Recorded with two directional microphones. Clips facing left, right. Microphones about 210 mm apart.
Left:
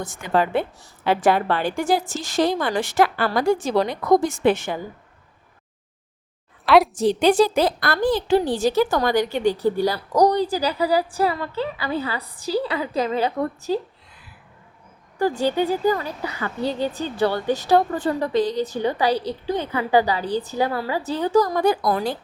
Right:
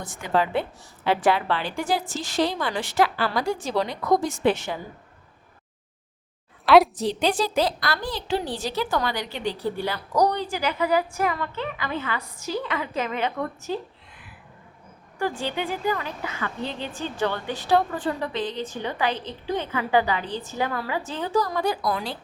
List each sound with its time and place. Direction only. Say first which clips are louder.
0.0 s a woman's voice: left 3 dB; 45° left (ahead or behind)
6.7 s a woman's voice: even; centre (ahead or behind)
6.9 s a woman's voice: left 7 dB; 50° left (ahead or behind)
15.2 s a woman's voice: left 7 dB; 40° left (ahead or behind)